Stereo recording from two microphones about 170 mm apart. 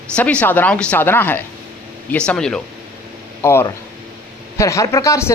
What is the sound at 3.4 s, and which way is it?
Speech, 15° left (ahead or behind).